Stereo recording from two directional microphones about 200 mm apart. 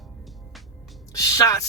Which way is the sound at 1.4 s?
15° left (ahead or behind).